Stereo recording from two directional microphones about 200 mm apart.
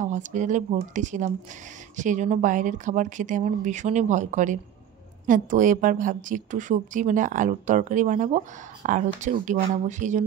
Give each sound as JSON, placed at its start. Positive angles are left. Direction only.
{"t": 0.0, "sound": "a woman's voice", "side_deg": -40}